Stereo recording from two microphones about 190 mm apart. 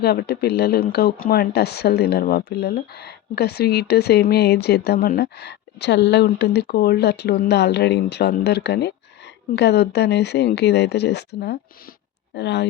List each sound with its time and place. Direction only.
0.0 s speech: 55° left (ahead or behind)